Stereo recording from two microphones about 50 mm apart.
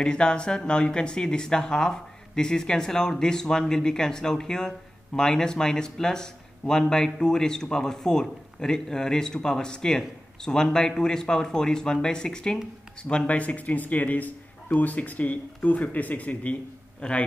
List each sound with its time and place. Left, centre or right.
0.0 s speech: centre
13.1 s speech: left
17.0 s a man's voice: centre